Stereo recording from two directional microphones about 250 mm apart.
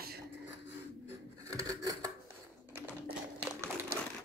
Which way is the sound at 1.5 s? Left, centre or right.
Centre.